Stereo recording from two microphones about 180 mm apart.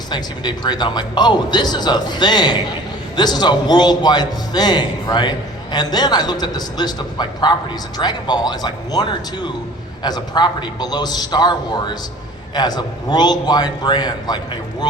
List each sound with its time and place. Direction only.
0.1 s speech: 25° left (ahead or behind)
12.5 s speech: 20° left (ahead or behind)